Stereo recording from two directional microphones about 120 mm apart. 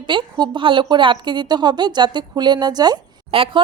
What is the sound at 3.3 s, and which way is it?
Speech, 50° right (ahead or behind).